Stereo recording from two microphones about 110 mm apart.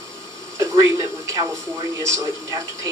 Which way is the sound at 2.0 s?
25° right (ahead or behind).